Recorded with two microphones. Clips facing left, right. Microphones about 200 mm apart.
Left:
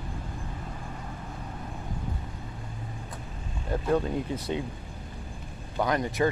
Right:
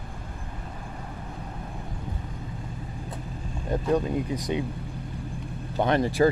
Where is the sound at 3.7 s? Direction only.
15° right (ahead or behind).